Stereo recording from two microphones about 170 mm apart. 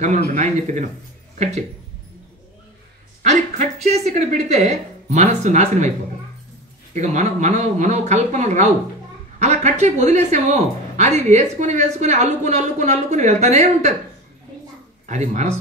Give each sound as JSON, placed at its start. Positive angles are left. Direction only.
{"t": 0.3, "sound": "speech", "side_deg": -45}
{"t": 3.2, "sound": "speech", "side_deg": -45}
{"t": 6.9, "sound": "speech", "side_deg": -45}
{"t": 15.0, "sound": "speech", "side_deg": -45}